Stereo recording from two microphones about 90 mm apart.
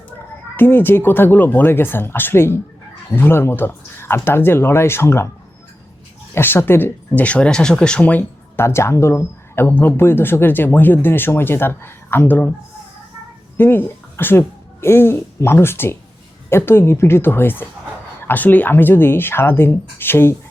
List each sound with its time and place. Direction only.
0.5 s speech: 25° left (ahead or behind)
6.3 s speech: 25° left (ahead or behind)
7.1 s speech: 15° left (ahead or behind)
8.5 s speech: 30° left (ahead or behind)
13.6 s speech: 25° left (ahead or behind)